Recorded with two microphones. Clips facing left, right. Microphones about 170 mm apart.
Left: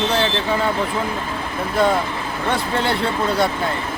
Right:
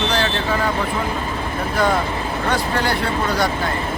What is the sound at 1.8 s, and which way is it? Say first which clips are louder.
Speech: left 1 dB; 25° left (ahead or behind).